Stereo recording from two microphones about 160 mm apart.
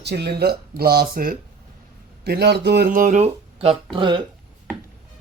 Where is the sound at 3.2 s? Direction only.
35° right (ahead or behind).